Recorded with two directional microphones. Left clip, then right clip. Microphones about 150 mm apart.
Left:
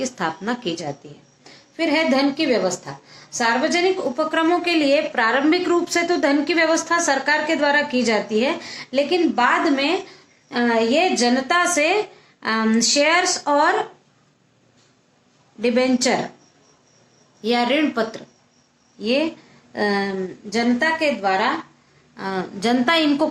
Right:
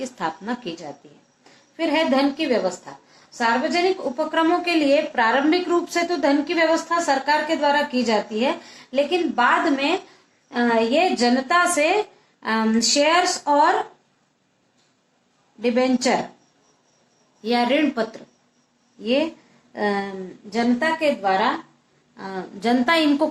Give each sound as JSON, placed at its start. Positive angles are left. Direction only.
{"t": 0.0, "sound": "a woman's voice", "side_deg": 25}
{"t": 15.6, "sound": "a woman's voice", "side_deg": 25}
{"t": 17.4, "sound": "a woman's voice", "side_deg": 35}